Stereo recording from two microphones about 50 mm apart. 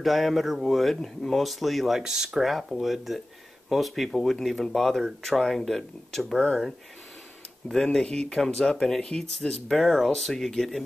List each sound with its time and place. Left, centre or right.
0.0 s speech: centre
7.6 s speech: centre